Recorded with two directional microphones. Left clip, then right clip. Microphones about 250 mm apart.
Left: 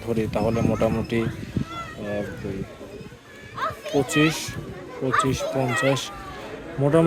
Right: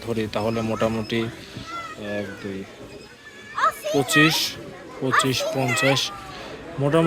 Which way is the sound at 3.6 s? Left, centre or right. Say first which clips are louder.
Right 4 dB; right.